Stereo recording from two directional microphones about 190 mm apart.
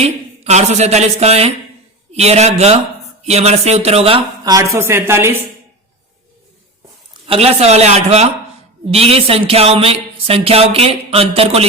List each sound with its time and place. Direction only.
0.0 s speech: 35° right (ahead or behind)
4.4 s a woman's voice: 15° right (ahead or behind)
7.3 s speech: 30° right (ahead or behind)